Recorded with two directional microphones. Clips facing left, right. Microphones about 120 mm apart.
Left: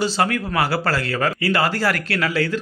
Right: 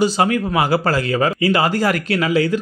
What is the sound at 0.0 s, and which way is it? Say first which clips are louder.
Speech: right 4 dB; 15° right (ahead or behind).